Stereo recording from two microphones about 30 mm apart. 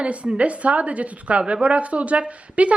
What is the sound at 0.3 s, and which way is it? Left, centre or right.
A woman's voice, right.